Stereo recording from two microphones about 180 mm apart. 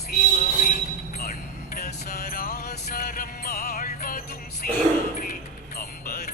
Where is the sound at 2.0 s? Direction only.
60° left (ahead or behind).